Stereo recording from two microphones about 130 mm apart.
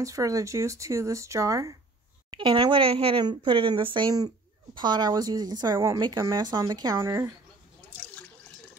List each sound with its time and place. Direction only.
0.0 s speech: 25° right (ahead or behind)
2.3 s speech: 40° right (ahead or behind); by 7.2 s 20° right (ahead or behind)